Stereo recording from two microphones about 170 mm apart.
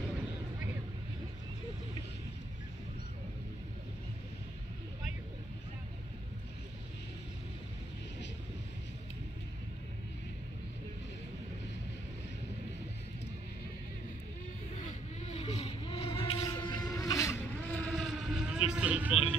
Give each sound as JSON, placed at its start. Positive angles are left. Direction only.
{"t": 14.8, "sound": "vehicle", "side_deg": 45}
{"t": 16.3, "sound": "music", "side_deg": 25}
{"t": 16.9, "sound": "boat", "side_deg": 20}
{"t": 18.7, "sound": "a sound", "side_deg": -5}